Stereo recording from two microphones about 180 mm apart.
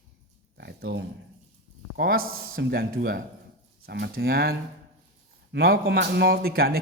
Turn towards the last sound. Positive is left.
turn(degrees=-55)  # may be behind; listen again after turning